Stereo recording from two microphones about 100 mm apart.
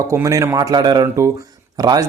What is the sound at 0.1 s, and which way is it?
Speech, 30° right (ahead or behind).